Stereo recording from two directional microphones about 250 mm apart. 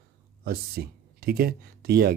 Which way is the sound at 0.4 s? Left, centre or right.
Right.